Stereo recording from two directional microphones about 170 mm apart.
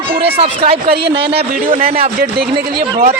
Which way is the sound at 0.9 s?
70° right (ahead or behind).